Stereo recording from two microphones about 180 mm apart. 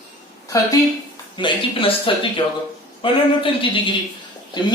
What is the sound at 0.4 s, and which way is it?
Speech, 20° left (ahead or behind).